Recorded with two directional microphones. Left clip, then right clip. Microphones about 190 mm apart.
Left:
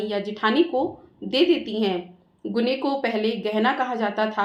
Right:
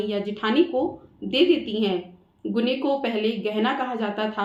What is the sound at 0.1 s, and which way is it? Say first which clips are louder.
A woman's voice: left 2 dB; 35° left (ahead or behind).